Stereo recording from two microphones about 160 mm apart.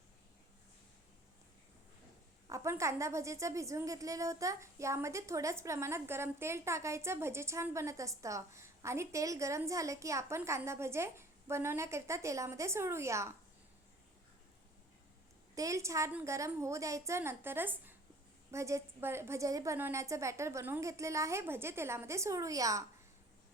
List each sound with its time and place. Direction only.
2.5 s a woman's voice: 20° right (ahead or behind)
15.5 s a woman's voice: 20° right (ahead or behind)